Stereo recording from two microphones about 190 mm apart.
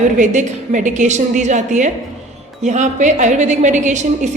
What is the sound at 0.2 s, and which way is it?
A woman's voice, 40° right (ahead or behind).